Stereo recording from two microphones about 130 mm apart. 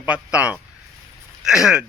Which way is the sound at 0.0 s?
10° right (ahead or behind).